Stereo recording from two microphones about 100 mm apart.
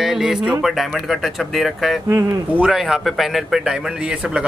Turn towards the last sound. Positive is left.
turn(degrees=-10)  # may be behind; listen again after turning